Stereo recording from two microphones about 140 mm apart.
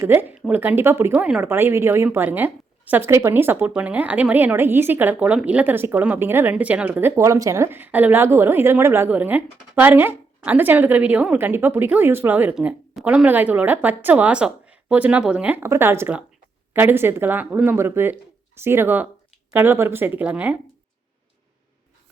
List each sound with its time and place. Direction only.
0.0 s speech: 15° right (ahead or behind)